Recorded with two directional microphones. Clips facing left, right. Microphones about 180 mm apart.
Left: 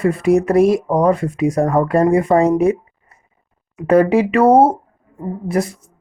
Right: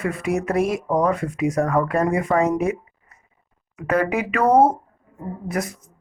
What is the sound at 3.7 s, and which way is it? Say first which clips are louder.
Speech: left 9 dB; 30° left (ahead or behind).